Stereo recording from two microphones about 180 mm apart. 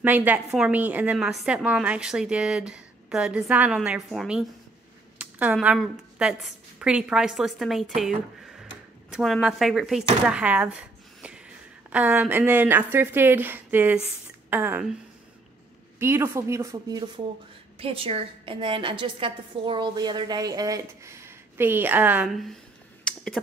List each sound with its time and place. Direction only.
0.0 s a woman's voice: 10° right (ahead or behind)
10.2 s a sound: 5° right (ahead or behind)
11.9 s a woman's voice: 10° right (ahead or behind)
16.0 s a woman's voice: 15° right (ahead or behind)
17.7 s a woman's voice: 30° right (ahead or behind); by 22.6 s centre (ahead or behind)
23.0 s a sound: 5° left (ahead or behind)